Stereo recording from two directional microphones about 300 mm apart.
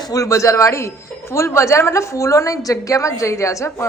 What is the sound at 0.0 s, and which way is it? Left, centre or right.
Speech, centre.